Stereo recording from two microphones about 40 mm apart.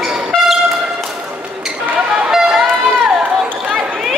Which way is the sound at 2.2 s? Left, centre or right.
Centre.